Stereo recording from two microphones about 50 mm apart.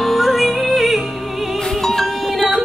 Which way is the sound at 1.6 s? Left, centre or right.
Centre.